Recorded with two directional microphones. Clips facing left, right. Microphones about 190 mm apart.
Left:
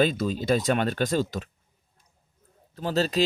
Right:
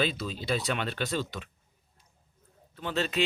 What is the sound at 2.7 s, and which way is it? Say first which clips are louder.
Speech: left 5 dB; 40° left (ahead or behind).